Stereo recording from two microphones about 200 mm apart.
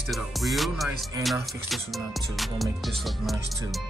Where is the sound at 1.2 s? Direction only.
Centre (ahead or behind).